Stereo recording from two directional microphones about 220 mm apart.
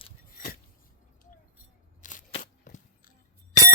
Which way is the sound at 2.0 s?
35° left (ahead or behind).